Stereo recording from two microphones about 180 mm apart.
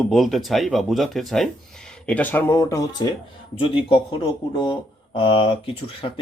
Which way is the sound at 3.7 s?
30° left (ahead or behind).